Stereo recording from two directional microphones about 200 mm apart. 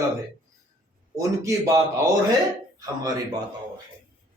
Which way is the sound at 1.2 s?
15° right (ahead or behind).